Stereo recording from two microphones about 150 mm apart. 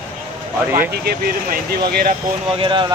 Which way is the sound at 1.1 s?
90° right.